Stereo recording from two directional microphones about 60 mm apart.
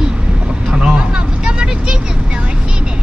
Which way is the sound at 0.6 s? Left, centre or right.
Centre.